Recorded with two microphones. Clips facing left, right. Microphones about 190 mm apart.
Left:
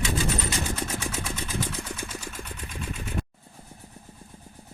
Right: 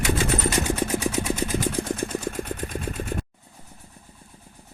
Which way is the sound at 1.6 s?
45° right (ahead or behind).